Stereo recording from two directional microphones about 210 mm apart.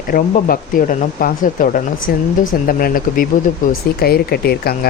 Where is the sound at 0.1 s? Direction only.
40° left (ahead or behind).